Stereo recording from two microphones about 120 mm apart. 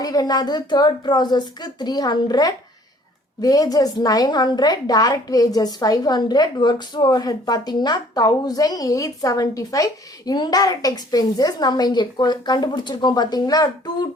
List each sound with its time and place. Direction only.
0.0 s a woman's voice: 30° left (ahead or behind)